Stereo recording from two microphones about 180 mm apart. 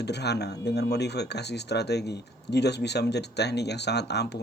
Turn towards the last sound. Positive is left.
turn(degrees=70)  # may be behind; listen again after turning